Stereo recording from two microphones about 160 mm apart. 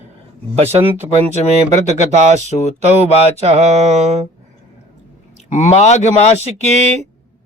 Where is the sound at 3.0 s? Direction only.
40° right (ahead or behind).